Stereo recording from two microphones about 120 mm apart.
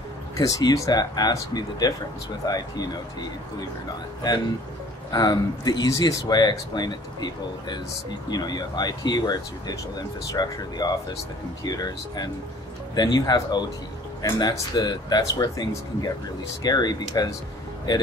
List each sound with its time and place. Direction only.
0.4 s speech: 30° left (ahead or behind)
5.1 s speech: 30° left (ahead or behind)